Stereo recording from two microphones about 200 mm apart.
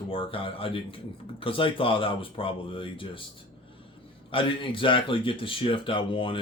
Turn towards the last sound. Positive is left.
turn(degrees=25)  # may be behind; listen again after turning